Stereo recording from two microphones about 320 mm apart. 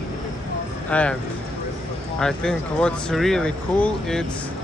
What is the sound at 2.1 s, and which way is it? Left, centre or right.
Speech, centre.